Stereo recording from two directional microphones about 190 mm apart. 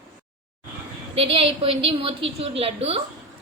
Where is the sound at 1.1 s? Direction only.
30° right (ahead or behind).